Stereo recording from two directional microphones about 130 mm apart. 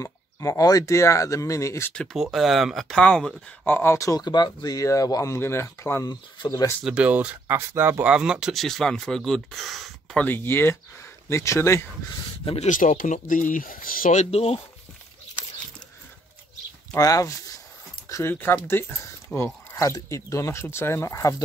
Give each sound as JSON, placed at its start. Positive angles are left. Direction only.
{"t": 0.0, "sound": "speech", "side_deg": 25}
{"t": 2.1, "sound": "speech", "side_deg": 0}
{"t": 3.6, "sound": "speech", "side_deg": 15}
{"t": 6.0, "sound": "speech", "side_deg": 30}
{"t": 6.8, "sound": "speech", "side_deg": -10}
{"t": 10.2, "sound": "speech", "side_deg": 15}
{"t": 12.6, "sound": "speech", "side_deg": 90}
{"t": 14.3, "sound": "speech", "side_deg": 50}
{"t": 16.9, "sound": "speech", "side_deg": 25}
{"t": 18.0, "sound": "a sound", "side_deg": 25}
{"t": 18.3, "sound": "speech", "side_deg": 15}